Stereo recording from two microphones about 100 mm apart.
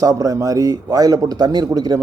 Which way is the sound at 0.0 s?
35° right (ahead or behind).